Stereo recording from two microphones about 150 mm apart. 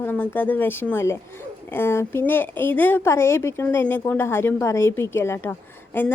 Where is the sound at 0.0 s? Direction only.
15° left (ahead or behind).